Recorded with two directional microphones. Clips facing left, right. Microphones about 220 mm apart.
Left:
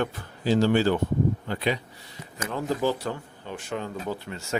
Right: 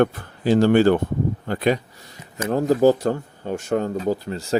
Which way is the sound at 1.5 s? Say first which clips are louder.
Right 7 dB; 45° right (ahead or behind).